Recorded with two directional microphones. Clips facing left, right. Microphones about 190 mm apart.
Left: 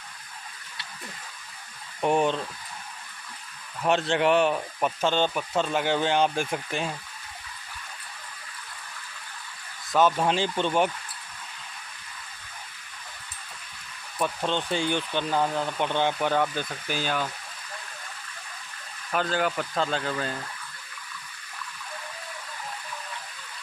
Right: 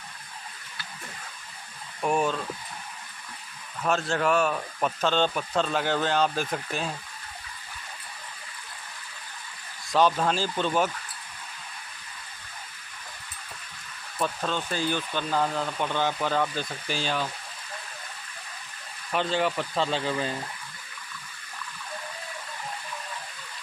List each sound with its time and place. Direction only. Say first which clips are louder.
2.0 s speech: left 2 dB; 25° left (ahead or behind)
3.8 s speech: left 3 dB; 20° left (ahead or behind)
4.7 s speech: right 3 dB; 10° left (ahead or behind)
9.9 s speech: even; 5° left (ahead or behind)
10.2 s speech: left 1 dB; 20° left (ahead or behind)
14.1 s speech: left 2 dB; 10° left (ahead or behind)
19.1 s speech: even; centre (ahead or behind)